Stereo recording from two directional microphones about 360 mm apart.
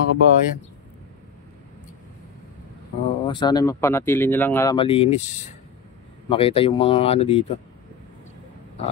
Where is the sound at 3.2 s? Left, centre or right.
Centre.